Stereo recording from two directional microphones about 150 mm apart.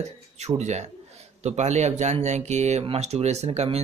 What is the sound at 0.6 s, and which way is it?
Speech, 50° right (ahead or behind).